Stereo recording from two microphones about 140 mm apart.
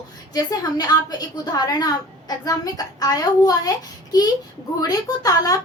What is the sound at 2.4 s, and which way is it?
A child's voice, 25° left (ahead or behind).